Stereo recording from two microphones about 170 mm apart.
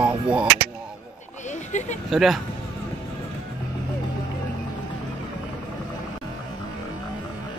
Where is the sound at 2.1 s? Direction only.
Centre (ahead or behind).